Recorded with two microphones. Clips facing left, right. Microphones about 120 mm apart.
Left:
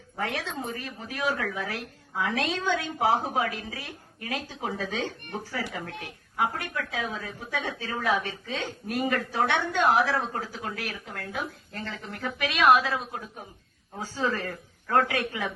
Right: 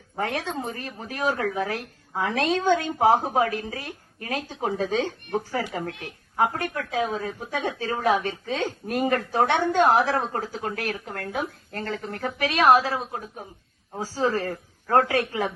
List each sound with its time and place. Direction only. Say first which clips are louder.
0.2 s a woman's voice: right 4 dB; 40° right (ahead or behind)